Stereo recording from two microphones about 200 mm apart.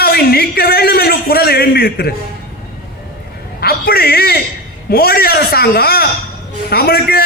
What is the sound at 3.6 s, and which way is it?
A man's voice, 50° left (ahead or behind).